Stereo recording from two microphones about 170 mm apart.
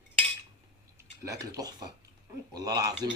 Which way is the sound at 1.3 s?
20° right (ahead or behind).